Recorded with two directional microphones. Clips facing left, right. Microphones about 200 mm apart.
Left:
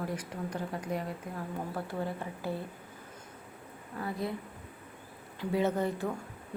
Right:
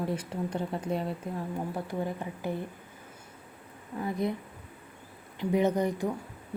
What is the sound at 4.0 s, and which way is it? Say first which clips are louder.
Speech: right 5 dB; 20° right (ahead or behind).